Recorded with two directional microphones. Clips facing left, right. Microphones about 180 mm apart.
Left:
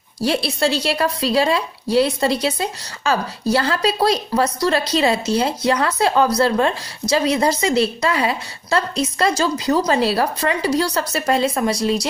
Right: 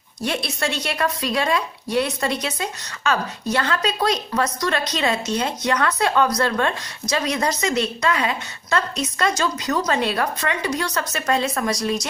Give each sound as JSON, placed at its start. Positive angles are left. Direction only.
{"t": 0.2, "sound": "speech", "side_deg": 30}